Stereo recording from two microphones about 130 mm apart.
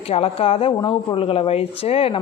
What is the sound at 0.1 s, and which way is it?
Speech, 50° left (ahead or behind).